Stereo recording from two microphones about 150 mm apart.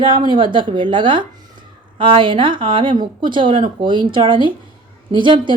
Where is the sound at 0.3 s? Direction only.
35° right (ahead or behind).